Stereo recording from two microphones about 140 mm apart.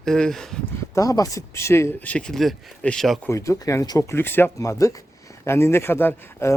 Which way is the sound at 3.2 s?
20° left (ahead or behind).